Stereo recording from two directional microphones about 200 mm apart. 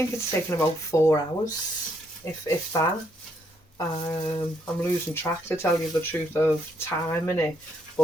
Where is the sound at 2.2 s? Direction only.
15° left (ahead or behind).